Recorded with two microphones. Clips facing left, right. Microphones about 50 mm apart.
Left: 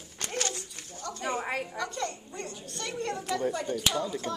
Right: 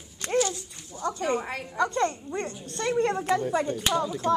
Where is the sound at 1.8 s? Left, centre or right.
Right.